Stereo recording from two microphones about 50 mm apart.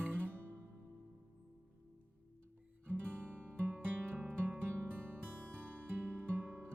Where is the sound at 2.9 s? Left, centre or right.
Right.